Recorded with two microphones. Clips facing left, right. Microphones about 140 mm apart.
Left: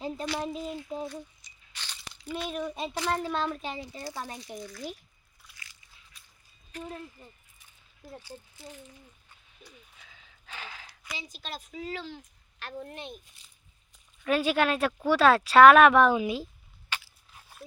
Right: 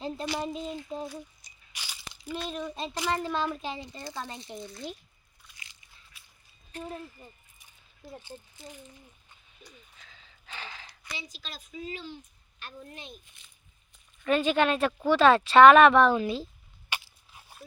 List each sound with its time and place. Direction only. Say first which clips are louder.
0.0 s speech: even; centre (ahead or behind)
3.2 s speech: even; centre (ahead or behind)
4.4 s a child's voice: even; 25° right (ahead or behind)
6.1 s a sound: even; 5° right (ahead or behind)
6.8 s speech: right 2 dB; 10° right (ahead or behind)
8.2 s a child's voice: even; 20° right (ahead or behind)
9.6 s a sound: even; centre (ahead or behind)
11.2 s a woman's voice: left 4 dB; 50° left (ahead or behind)
13.2 s a child's voice: right 1 dB; 35° left (ahead or behind)
14.3 s speech: right 1 dB; 5° left (ahead or behind)
16.9 s biting: right 1 dB; 15° right (ahead or behind)